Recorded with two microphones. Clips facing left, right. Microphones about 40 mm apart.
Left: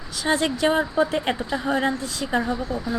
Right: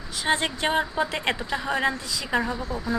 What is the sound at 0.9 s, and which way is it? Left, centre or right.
Speech, right.